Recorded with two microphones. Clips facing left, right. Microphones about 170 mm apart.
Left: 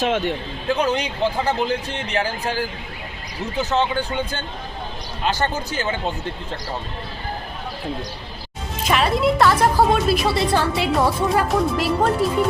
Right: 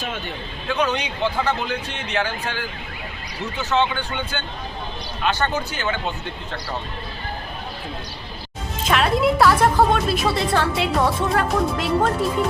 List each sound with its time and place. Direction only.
0.0 s speech: 85° left
0.7 s speech: 35° left (ahead or behind)
3.7 s speech: 35° left (ahead or behind)
8.9 s a woman's voice: centre (ahead or behind)